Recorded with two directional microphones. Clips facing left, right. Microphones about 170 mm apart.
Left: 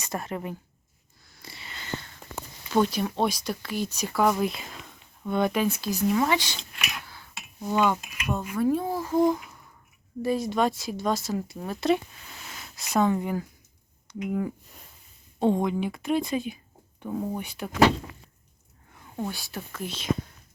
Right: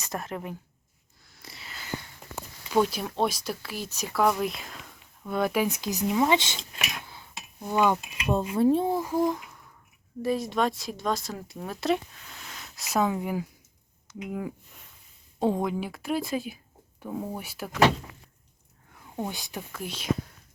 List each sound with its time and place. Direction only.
0.0 s a woman's voice: centre (ahead or behind)
1.3 s sniff: centre (ahead or behind)
2.7 s a woman's voice: 5° right (ahead or behind)
5.6 s speech: 15° right (ahead or behind)
6.6 s a sound: 35° right (ahead or behind)
7.0 s a sound: 20° right (ahead or behind)
7.7 s speech: 15° right (ahead or behind)
8.1 s speech: 30° right (ahead or behind)
9.1 s a child's voice: centre (ahead or behind)
15.4 s a woman's voice: 5° right (ahead or behind)
19.1 s speech: 20° right (ahead or behind)